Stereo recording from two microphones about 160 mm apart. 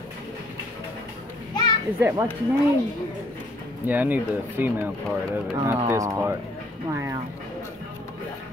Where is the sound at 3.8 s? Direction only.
10° right (ahead or behind).